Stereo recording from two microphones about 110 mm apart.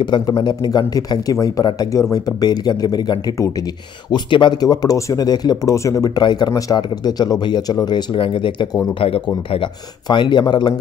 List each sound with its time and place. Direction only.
0.0 s speech: 45° left (ahead or behind)
4.1 s speech: 45° left (ahead or behind)